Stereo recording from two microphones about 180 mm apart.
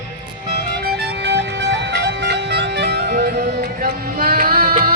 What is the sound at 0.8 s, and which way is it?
Music, 70° right (ahead or behind).